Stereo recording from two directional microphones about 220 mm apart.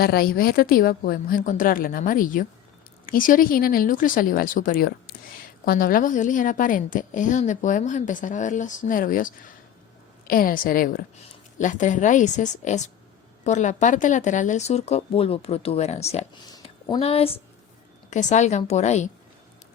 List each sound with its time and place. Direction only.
0.0 s a woman's voice: 45° left (ahead or behind)